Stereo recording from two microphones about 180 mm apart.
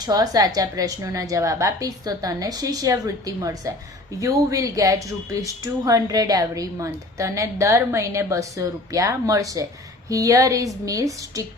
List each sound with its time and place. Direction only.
0.0 s a woman's voice: 20° right (ahead or behind)